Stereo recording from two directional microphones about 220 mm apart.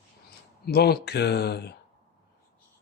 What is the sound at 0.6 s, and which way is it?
Speech, 45° left (ahead or behind).